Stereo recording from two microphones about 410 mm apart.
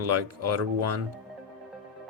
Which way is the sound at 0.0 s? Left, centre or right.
Right.